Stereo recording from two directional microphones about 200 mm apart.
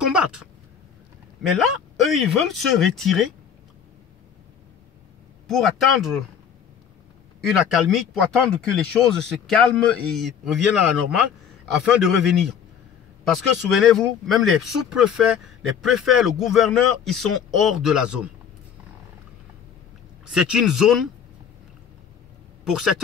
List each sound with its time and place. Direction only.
0.0 s a sound: 5° right (ahead or behind)
1.6 s speech: centre (ahead or behind)
5.5 s speech: centre (ahead or behind)
7.4 s speech: centre (ahead or behind)
20.2 s speech: 5° right (ahead or behind)